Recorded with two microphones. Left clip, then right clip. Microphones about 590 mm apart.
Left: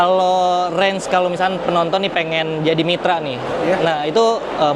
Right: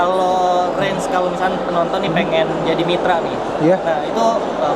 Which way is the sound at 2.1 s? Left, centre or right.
Left.